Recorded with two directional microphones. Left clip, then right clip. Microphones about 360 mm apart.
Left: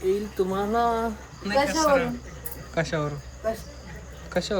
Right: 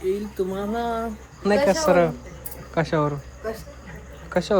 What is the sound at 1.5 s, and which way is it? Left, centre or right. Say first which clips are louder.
Speech: right 3 dB; centre.